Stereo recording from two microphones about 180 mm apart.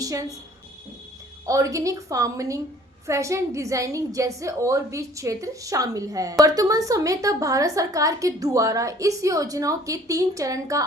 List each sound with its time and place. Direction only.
0.0 s a woman's voice: 20° right (ahead or behind)
1.5 s a woman's voice: 15° right (ahead or behind)